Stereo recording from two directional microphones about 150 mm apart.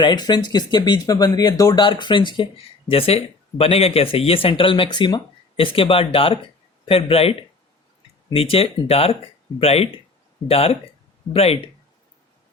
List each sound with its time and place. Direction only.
0.0 s speech: 30° left (ahead or behind)